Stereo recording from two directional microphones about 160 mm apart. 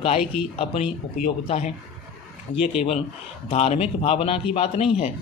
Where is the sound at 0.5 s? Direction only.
40° left (ahead or behind).